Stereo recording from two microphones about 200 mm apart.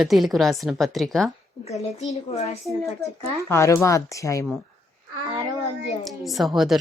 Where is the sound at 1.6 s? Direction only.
35° left (ahead or behind).